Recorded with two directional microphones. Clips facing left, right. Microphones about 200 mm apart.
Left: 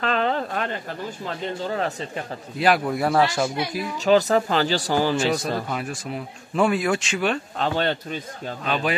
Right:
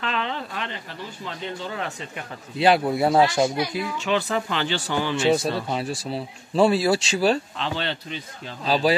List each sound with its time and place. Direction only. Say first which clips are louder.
0.0 s speech: left 5 dB; 45° left (ahead or behind)
2.6 s speech: right 2 dB; 25° right (ahead or behind)
4.0 s speech: left 8 dB; 40° left (ahead or behind)
5.7 s speech: right 2 dB; 30° right (ahead or behind)
7.5 s a man's voice: left 5 dB; 45° left (ahead or behind)
8.6 s speech: right 4 dB; 35° right (ahead or behind)